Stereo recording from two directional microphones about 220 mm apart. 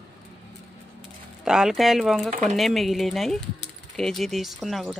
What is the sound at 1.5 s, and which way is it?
Speech, centre (ahead or behind).